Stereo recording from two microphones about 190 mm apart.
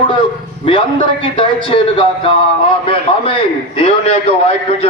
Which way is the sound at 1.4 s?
25° left (ahead or behind).